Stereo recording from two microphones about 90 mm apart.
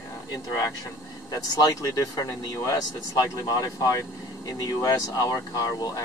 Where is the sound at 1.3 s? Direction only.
40° left (ahead or behind).